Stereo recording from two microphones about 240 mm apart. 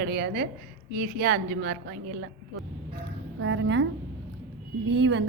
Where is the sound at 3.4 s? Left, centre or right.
Right.